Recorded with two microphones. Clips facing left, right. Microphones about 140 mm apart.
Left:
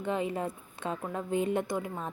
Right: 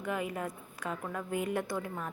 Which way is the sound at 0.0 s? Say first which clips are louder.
Left 4 dB; 25° left (ahead or behind).